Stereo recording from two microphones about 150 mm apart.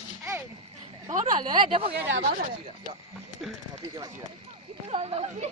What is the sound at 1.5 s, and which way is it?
Speech, 35° right (ahead or behind).